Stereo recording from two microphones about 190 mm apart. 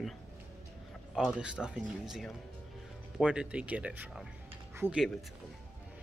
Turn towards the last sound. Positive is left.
turn(degrees=-10)  # may be behind; listen again after turning